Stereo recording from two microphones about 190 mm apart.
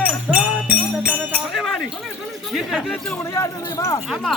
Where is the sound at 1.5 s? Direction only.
Centre (ahead or behind).